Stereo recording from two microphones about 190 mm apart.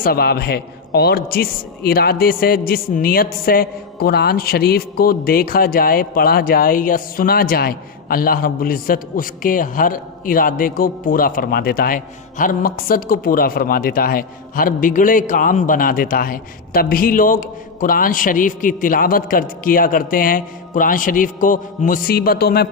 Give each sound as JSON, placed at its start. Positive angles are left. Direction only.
{"t": 0.0, "sound": "a man's voice", "side_deg": 55}